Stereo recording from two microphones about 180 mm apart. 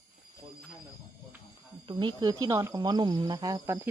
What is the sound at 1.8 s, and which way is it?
Speech, 25° right (ahead or behind).